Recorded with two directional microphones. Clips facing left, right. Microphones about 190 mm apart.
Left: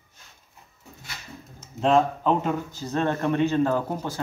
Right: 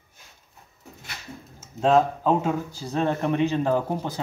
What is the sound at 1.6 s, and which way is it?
Speech, 5° right (ahead or behind).